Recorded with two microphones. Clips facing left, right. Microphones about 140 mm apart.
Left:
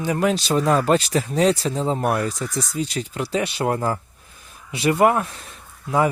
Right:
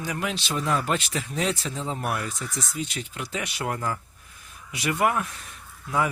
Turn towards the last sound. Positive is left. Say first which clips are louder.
# left 6 dB
turn(degrees=30)  # may be behind; listen again after turning